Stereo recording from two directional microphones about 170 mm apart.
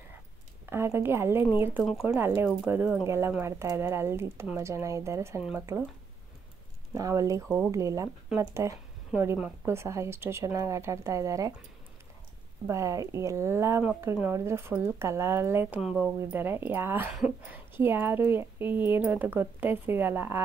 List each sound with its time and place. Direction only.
0.7 s speech: 15° right (ahead or behind)
6.9 s speech: 20° right (ahead or behind)
7.4 s speech: 5° right (ahead or behind)
7.7 s speech: 20° right (ahead or behind)
12.6 s speech: 20° right (ahead or behind)